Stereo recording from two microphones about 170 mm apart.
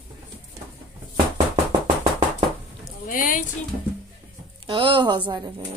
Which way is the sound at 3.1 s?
55° left (ahead or behind).